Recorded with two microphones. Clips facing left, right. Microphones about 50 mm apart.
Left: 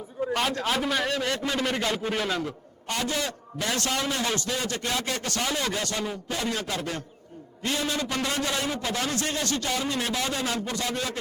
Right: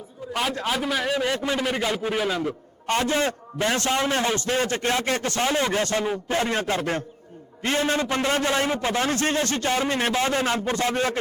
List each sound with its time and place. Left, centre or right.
0.3 s a man's voice: centre
2.8 s a man's voice: right